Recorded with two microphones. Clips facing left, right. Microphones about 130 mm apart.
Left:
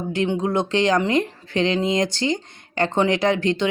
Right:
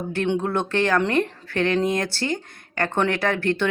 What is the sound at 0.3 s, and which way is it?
Speech, 15° left (ahead or behind).